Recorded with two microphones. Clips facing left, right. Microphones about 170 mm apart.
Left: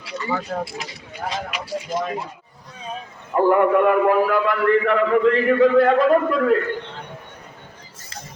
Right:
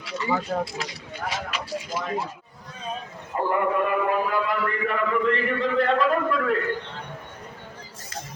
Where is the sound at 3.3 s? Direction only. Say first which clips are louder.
Left 8 dB; 80° left; by 5.9 s 65° left (ahead or behind).